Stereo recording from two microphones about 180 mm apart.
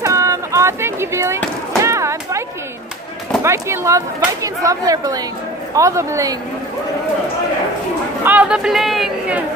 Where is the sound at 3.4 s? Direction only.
15° right (ahead or behind).